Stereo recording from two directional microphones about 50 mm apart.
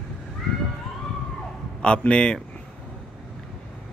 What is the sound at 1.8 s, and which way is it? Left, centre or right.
Speech, centre.